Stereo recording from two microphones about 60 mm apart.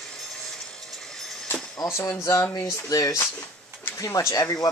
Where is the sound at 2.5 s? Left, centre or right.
Left.